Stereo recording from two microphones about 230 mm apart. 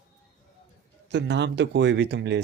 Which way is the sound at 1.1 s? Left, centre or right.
Right.